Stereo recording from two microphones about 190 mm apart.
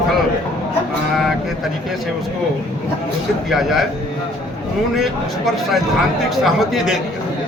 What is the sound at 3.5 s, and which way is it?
Speech, centre (ahead or behind).